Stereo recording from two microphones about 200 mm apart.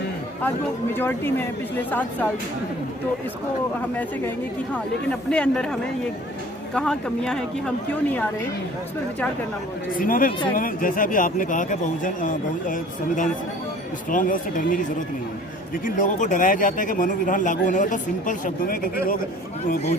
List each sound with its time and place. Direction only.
0.9 s speech: 10° left (ahead or behind)
4.7 s speech: 5° left (ahead or behind)
6.7 s speech: 5° left (ahead or behind)
9.9 s speech: 45° left (ahead or behind)